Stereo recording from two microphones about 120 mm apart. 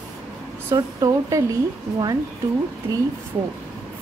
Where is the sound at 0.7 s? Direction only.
30° right (ahead or behind).